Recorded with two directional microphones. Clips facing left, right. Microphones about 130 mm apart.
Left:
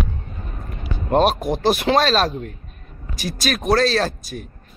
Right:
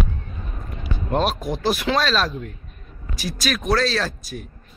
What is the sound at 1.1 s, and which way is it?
Speech, 55° left (ahead or behind).